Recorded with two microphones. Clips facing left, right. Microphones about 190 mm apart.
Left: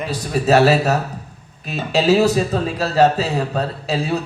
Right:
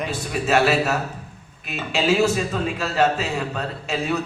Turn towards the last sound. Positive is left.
turn(degrees=35)  # may be behind; listen again after turning